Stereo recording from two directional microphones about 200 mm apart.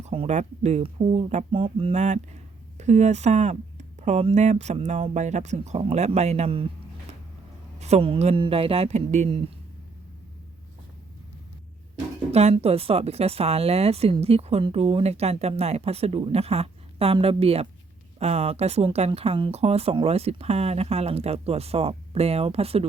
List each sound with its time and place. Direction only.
0.0 s speech: 30° right (ahead or behind)
7.8 s speech: 35° right (ahead or behind)
12.3 s speech: 30° right (ahead or behind)